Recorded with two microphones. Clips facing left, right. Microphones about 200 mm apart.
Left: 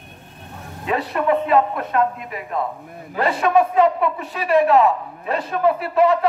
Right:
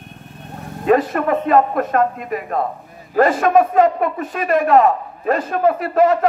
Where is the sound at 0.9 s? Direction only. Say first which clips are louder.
Right 4 dB; 45° right (ahead or behind).